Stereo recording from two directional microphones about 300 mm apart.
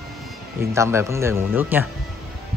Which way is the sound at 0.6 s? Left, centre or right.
Centre.